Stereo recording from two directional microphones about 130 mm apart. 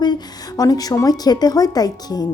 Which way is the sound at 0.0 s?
30° left (ahead or behind).